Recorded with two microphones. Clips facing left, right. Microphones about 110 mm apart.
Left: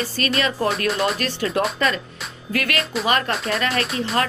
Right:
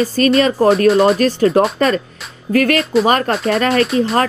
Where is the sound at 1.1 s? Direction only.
35° right (ahead or behind).